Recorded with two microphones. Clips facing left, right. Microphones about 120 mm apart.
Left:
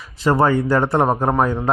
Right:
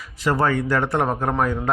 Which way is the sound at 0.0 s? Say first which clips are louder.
Left 4 dB; 25° left (ahead or behind).